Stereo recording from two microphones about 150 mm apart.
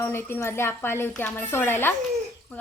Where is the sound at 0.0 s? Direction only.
15° left (ahead or behind).